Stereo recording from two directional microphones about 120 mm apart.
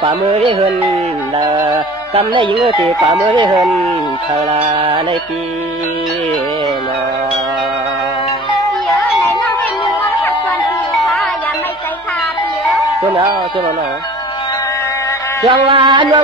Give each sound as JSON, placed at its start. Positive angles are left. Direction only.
{"t": 0.0, "sound": "music", "side_deg": -45}
{"t": 1.7, "sound": "speech", "side_deg": -45}
{"t": 3.3, "sound": "music", "side_deg": -40}
{"t": 15.4, "sound": "music", "side_deg": -45}